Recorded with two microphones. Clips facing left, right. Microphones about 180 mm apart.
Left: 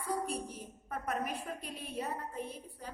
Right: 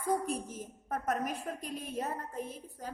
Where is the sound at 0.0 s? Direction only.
45° right (ahead or behind).